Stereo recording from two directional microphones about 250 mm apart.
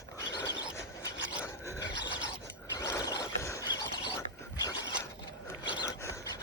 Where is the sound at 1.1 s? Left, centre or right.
Left.